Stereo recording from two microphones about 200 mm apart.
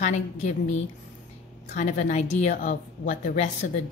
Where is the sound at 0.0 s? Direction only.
35° left (ahead or behind).